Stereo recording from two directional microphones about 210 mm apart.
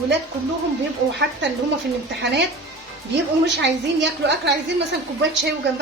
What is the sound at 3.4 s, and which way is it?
Speech, 55° right (ahead or behind).